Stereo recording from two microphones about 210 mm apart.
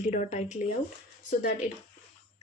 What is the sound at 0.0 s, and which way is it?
Speech, 30° left (ahead or behind).